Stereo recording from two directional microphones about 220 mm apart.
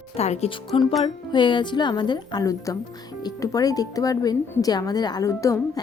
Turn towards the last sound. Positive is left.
turn(degrees=15)  # may be behind; listen again after turning